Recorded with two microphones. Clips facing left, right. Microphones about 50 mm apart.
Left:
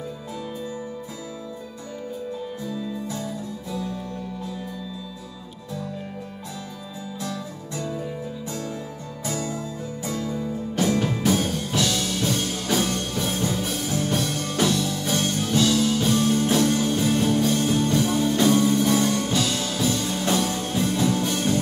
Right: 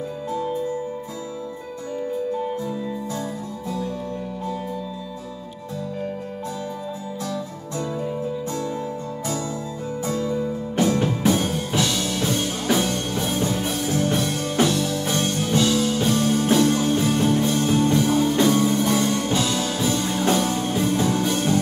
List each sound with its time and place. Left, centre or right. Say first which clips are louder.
2.6 s music: right 2 dB; right
7.7 s music: right 3 dB; right
9.3 s music: even; left
10.0 s music: right 4 dB; right